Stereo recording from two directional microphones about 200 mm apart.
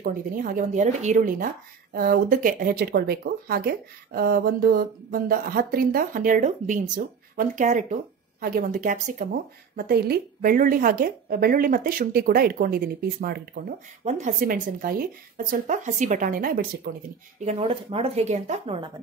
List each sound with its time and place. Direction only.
0.4 s speech: 40° right (ahead or behind)
17.5 s speech: 30° right (ahead or behind)